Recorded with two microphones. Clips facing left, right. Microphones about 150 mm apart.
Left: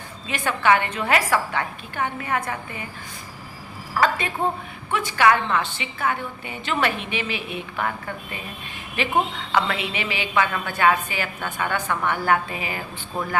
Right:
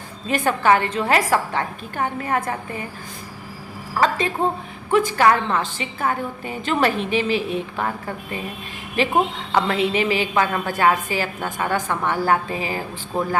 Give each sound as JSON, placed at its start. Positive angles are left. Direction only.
{"t": 0.3, "sound": "a woman's voice", "side_deg": -40}
{"t": 4.9, "sound": "a woman's voice", "side_deg": -40}